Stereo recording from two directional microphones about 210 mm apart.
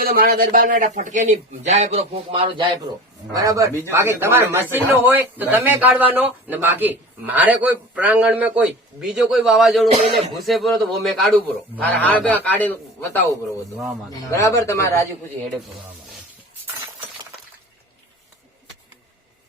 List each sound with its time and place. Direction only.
0.0 s a man's voice: 45° right (ahead or behind); by 15.0 s 15° left (ahead or behind)